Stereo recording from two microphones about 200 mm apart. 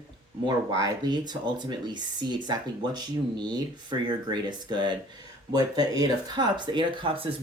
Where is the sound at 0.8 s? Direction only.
20° right (ahead or behind).